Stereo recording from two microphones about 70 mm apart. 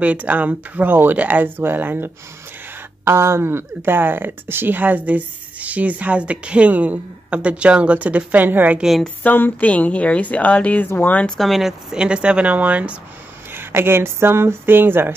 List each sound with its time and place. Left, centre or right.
0.0 s speech: right
3.1 s speech: right
9.2 s a woman's voice: left
11.3 s speech: centre
13.5 s speech: right